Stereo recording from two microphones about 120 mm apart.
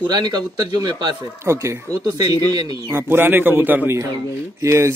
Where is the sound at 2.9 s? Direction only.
20° right (ahead or behind).